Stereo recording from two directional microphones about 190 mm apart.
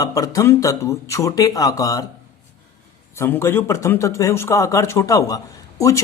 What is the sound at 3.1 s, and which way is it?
Speech, 15° left (ahead or behind).